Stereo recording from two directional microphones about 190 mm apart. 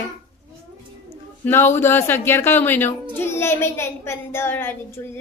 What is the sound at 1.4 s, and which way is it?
A child's voice, 10° left (ahead or behind).